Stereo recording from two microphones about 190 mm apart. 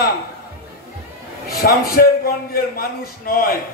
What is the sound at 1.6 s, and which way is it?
A man's voice, 55° left (ahead or behind).